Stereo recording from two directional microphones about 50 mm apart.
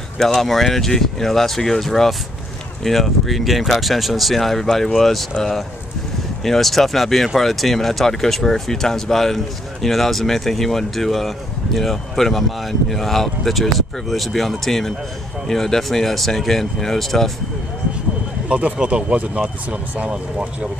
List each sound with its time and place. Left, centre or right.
0.2 s speech: centre
18.5 s speech: right